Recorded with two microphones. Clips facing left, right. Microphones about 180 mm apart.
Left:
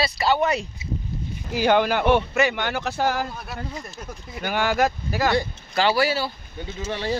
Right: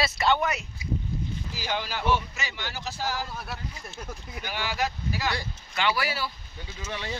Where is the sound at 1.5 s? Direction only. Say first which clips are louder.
Left 15 dB; 60° left (ahead or behind).